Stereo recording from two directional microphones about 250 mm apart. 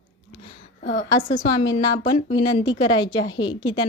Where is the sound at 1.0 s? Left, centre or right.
Centre.